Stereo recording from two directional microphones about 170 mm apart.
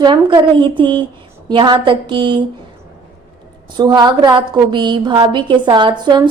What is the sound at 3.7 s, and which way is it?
A woman's voice, 25° right (ahead or behind).